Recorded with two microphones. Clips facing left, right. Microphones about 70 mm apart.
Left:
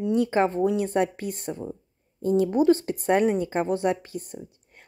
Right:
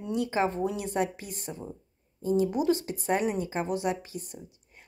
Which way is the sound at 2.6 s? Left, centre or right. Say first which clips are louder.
Left 6 dB; left.